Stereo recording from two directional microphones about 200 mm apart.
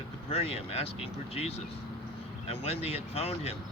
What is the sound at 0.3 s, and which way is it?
Speech, 30° left (ahead or behind).